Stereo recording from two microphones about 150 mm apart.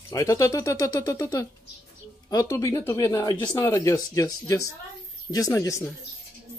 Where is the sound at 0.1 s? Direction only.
20° left (ahead or behind).